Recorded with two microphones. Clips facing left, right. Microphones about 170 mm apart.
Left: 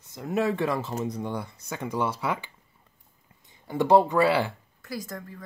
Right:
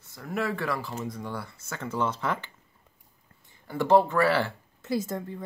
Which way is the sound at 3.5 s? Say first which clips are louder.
Left 1 dB; 20° left (ahead or behind).